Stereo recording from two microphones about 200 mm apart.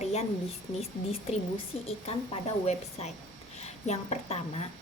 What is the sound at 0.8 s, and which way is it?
A woman's voice, 30° left (ahead or behind).